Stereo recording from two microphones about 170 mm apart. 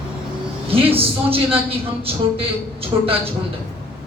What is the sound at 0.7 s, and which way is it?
Speech, 35° right (ahead or behind).